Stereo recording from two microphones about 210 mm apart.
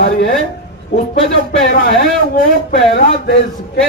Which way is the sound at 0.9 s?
35° left (ahead or behind).